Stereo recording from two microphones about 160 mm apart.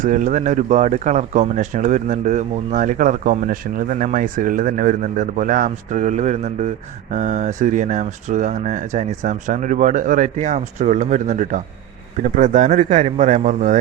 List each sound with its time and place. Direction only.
0.0 s speech: 50° right (ahead or behind)